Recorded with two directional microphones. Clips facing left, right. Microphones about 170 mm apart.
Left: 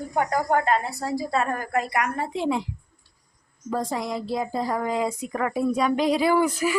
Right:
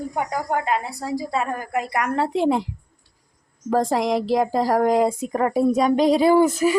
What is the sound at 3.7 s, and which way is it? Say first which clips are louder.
Speech: right 7 dB; 85° right.